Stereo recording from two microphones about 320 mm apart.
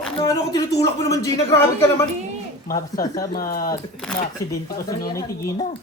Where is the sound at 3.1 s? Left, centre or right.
Left.